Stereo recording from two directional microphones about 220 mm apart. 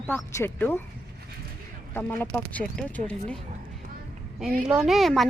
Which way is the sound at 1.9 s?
10° left (ahead or behind).